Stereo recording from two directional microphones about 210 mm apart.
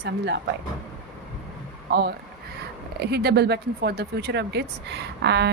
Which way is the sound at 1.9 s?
50° right (ahead or behind).